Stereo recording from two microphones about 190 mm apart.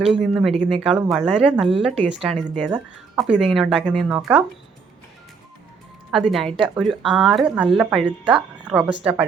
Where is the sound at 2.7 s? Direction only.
25° right (ahead or behind).